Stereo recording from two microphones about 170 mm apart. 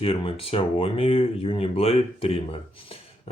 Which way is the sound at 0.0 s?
35° left (ahead or behind).